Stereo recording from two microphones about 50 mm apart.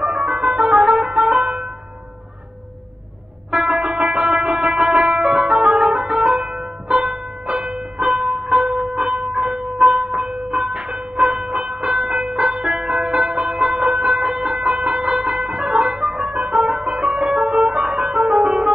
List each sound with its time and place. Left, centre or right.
0.0 s music: centre
3.5 s music: centre
3.8 s music: centre
4.2 s music: centre
7.4 s music: right
7.7 s music: centre
10.6 s train: centre
10.9 s music: centre
11.8 s train: centre
12.7 s music: centre
16.8 s music: centre